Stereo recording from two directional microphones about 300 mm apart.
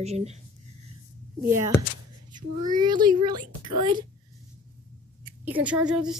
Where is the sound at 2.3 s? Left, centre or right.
Centre.